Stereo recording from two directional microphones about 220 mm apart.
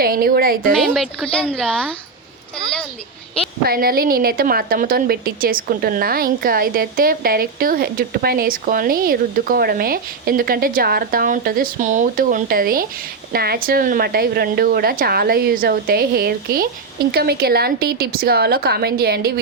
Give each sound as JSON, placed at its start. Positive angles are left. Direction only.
{"t": 0.0, "sound": "a woman's voice", "side_deg": -40}
{"t": 0.7, "sound": "speech", "side_deg": 0}
{"t": 3.6, "sound": "a woman's voice", "side_deg": -45}